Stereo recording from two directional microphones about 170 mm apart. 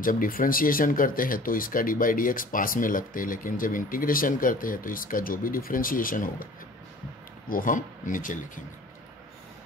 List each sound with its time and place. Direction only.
0.0 s speech: 55° left (ahead or behind)